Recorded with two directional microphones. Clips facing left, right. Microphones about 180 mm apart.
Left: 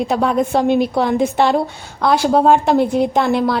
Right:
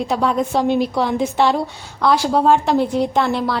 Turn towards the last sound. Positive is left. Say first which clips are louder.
# left 3 dB
turn(degrees=50)  # may be behind; listen again after turning